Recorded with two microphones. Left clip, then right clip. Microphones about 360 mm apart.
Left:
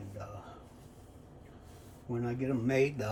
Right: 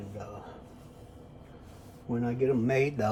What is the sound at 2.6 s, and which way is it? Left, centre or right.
Speech, centre.